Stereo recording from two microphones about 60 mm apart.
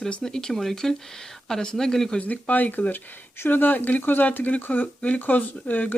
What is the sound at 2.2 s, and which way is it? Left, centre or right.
Speech, left.